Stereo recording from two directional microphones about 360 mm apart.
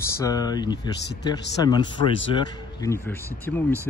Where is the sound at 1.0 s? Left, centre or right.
Left.